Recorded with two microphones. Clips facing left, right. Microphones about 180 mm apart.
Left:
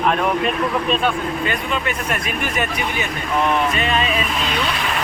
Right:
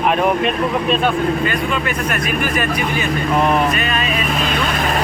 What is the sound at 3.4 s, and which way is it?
Speech, 35° right (ahead or behind).